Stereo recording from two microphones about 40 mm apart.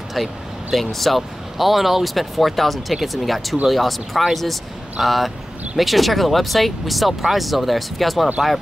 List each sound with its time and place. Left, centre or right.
0.1 s speech: centre